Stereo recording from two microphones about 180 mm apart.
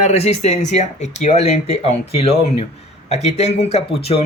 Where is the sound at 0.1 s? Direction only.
35° left (ahead or behind).